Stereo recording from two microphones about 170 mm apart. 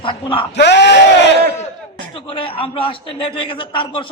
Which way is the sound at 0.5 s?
90° left.